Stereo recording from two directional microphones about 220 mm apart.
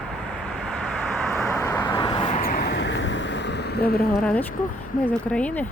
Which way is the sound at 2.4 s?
45° left (ahead or behind).